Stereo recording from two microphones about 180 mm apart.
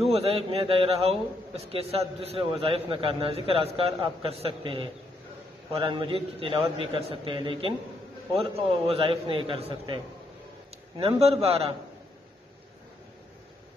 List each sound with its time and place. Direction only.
0.1 s a man's voice: 35° right (ahead or behind)
11.0 s a man's voice: 35° right (ahead or behind)